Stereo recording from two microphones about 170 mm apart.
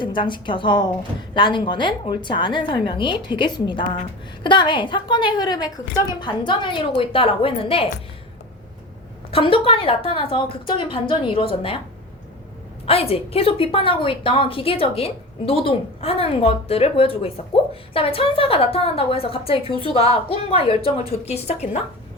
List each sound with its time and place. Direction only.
0.0 s a woman's voice: 30° left (ahead or behind)
9.3 s a woman's voice: 30° left (ahead or behind)
12.8 s a woman's voice: 35° left (ahead or behind)